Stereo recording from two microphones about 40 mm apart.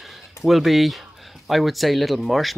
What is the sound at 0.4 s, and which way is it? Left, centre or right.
Speech, centre.